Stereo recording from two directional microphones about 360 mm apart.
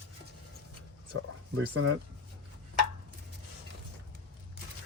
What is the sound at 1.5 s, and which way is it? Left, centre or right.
Speech, right.